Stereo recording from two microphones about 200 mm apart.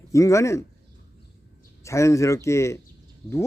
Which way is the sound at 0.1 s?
15° left (ahead or behind).